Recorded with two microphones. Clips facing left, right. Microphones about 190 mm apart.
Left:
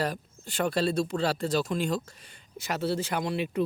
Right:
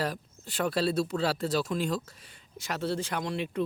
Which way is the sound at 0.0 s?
Centre (ahead or behind).